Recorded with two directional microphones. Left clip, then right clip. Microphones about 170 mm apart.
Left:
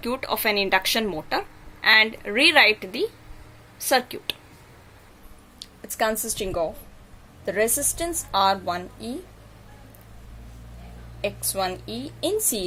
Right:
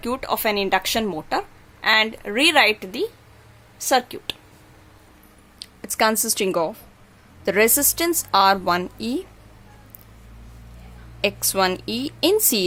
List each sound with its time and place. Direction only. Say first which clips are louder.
0.0 s a woman's voice: right 2 dB; 20° right (ahead or behind)
5.5 s a woman's voice: right 4 dB; 30° right (ahead or behind)
11.2 s a woman's voice: right 6 dB; 35° right (ahead or behind)